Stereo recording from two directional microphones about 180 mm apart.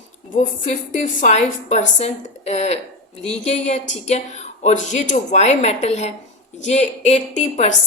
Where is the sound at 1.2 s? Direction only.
40° left (ahead or behind).